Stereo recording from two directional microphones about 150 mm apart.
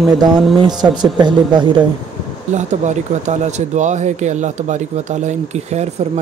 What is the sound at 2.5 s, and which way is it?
Speech, 50° right (ahead or behind).